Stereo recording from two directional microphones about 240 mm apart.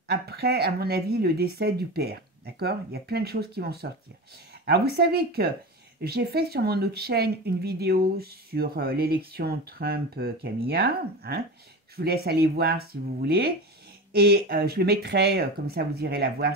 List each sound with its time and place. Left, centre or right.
0.1 s speech: right